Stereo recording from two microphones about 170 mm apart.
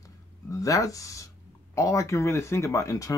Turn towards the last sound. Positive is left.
turn(degrees=20)  # may be behind; listen again after turning